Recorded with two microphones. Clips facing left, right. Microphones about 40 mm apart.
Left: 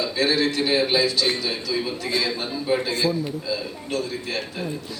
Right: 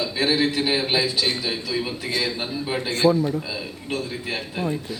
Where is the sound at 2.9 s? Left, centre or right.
Right.